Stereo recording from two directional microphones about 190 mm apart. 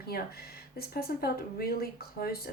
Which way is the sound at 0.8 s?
55° left (ahead or behind).